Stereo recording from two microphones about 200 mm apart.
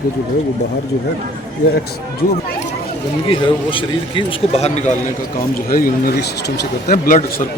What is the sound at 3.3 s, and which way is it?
A man's voice, 25° left (ahead or behind).